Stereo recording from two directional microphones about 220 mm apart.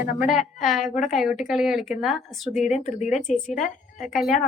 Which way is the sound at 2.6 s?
30° left (ahead or behind).